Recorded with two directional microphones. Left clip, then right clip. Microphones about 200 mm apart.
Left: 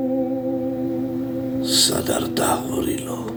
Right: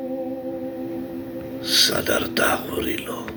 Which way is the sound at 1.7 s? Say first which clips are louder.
Right 1 dB; 15° left (ahead or behind).